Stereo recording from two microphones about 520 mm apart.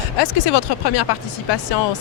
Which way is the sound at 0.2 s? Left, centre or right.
Left.